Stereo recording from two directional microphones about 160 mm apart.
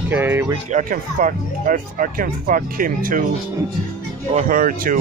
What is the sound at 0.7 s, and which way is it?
Speech, 50° right (ahead or behind).